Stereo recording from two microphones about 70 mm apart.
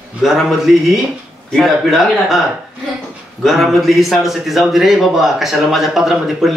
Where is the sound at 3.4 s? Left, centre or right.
Centre.